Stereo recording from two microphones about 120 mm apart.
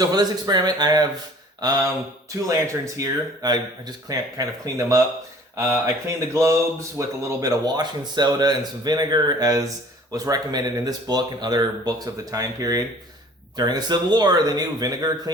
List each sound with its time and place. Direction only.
0.0 s speech: 35° right (ahead or behind)